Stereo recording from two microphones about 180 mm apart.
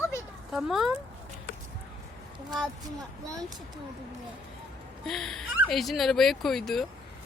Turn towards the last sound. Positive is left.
turn(degrees=0)  # may be behind; listen again after turning